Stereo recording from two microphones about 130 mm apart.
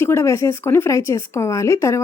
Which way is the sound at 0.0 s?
20° left (ahead or behind).